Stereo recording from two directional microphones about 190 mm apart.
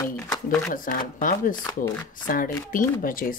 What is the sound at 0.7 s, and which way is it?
Speech, 45° left (ahead or behind).